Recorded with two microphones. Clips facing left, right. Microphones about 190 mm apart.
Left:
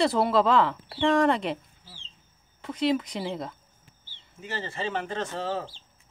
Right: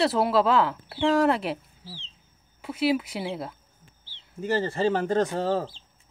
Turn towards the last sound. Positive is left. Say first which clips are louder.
# right 6 dB
turn(degrees=-40)  # may be behind; listen again after turning